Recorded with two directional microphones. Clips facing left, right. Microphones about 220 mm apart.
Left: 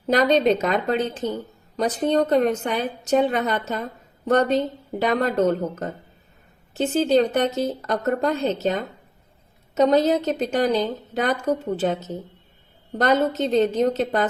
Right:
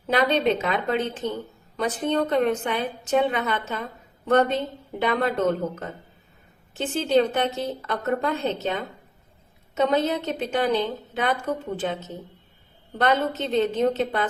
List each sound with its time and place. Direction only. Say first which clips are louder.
0.1 s a woman's voice: left 3 dB; 40° left (ahead or behind)